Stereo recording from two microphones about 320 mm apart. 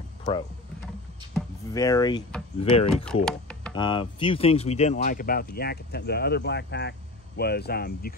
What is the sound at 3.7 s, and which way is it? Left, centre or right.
Speech, centre.